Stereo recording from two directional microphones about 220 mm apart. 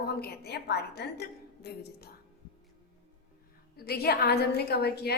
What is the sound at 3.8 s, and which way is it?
A woman's voice, 45° left (ahead or behind).